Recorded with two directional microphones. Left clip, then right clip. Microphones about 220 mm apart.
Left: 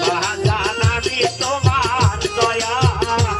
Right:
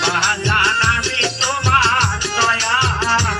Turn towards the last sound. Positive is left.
turn(degrees=20)  # may be behind; listen again after turning